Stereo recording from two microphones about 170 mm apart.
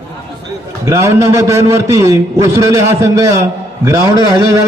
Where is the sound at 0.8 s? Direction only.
15° right (ahead or behind).